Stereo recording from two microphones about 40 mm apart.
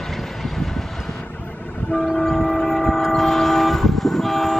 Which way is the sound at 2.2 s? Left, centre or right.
Centre.